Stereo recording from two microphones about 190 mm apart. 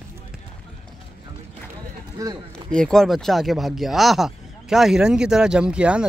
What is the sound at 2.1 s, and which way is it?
Speech, 20° right (ahead or behind).